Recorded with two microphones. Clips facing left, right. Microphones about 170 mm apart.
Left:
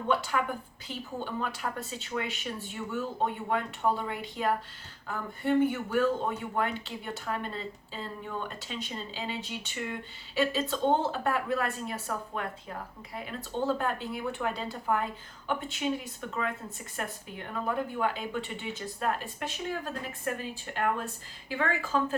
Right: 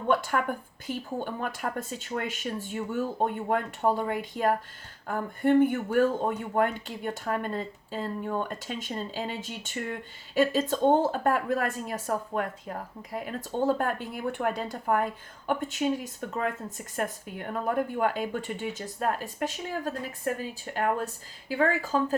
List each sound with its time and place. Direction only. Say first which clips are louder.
0.1 s speech: right 3 dB; 50° right (ahead or behind)